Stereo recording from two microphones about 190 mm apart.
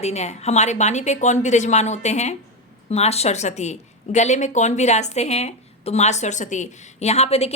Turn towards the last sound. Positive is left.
turn(degrees=30)  # may be behind; listen again after turning